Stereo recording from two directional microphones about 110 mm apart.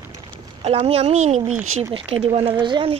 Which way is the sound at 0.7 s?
65° right (ahead or behind).